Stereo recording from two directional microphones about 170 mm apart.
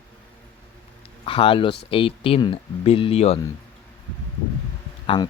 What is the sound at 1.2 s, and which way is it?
Speech, 30° left (ahead or behind).